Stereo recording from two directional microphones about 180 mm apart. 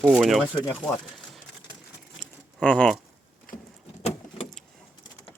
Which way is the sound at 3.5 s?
50° left (ahead or behind).